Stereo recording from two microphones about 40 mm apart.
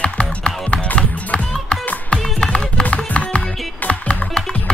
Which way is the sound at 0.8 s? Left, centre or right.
Left.